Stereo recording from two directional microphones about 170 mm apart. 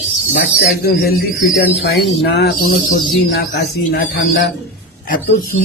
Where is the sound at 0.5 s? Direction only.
70° left (ahead or behind); by 4.5 s 85° left.